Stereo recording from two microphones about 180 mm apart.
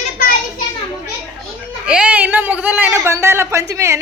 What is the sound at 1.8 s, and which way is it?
A woman's voice, 5° right (ahead or behind).